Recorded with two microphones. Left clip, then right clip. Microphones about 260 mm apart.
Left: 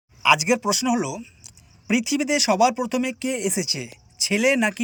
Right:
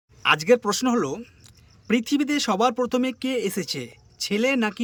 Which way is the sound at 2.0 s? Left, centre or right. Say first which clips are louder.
Left 5 dB; centre.